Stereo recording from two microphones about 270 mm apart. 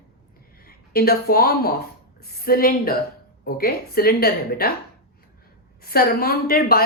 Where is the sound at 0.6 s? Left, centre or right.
Left.